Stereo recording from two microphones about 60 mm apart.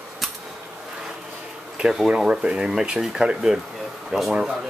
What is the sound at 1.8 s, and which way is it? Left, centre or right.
Speech, centre.